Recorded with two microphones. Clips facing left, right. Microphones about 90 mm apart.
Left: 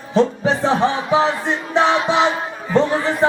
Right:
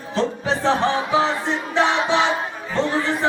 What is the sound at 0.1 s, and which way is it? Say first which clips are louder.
Music: left 6 dB; 15° left (ahead or behind).